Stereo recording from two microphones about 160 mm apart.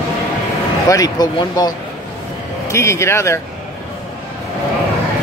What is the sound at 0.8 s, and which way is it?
Speech, 25° left (ahead or behind).